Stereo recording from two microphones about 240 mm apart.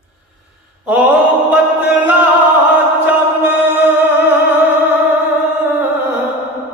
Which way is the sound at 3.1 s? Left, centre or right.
Centre.